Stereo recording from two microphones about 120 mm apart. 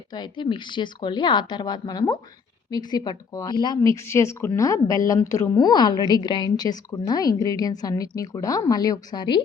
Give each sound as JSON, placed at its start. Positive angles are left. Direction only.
{"t": 0.1, "sound": "a woman's voice", "side_deg": 40}